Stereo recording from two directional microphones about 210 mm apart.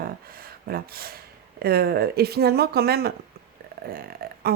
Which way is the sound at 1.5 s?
50° right (ahead or behind).